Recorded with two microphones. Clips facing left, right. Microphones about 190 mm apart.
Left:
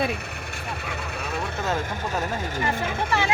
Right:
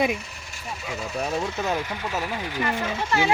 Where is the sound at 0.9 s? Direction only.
60° left (ahead or behind).